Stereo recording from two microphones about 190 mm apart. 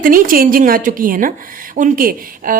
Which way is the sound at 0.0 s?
45° right (ahead or behind).